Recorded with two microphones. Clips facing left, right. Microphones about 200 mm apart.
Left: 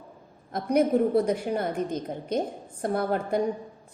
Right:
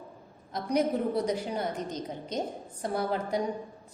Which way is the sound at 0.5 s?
55° left (ahead or behind).